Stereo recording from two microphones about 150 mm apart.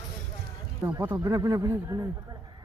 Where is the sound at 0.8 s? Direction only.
15° right (ahead or behind).